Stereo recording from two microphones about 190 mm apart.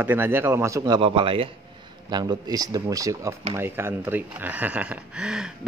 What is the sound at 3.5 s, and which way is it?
Mantra, 10° right (ahead or behind).